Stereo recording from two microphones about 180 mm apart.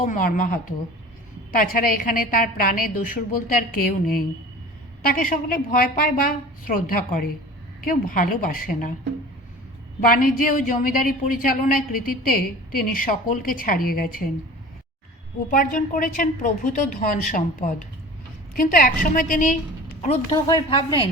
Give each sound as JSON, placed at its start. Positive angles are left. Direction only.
{"t": 0.0, "sound": "a woman's voice", "side_deg": 50}
{"t": 10.0, "sound": "a woman's voice", "side_deg": 50}
{"t": 15.4, "sound": "a woman's voice", "side_deg": 50}
{"t": 20.0, "sound": "a woman's voice", "side_deg": 30}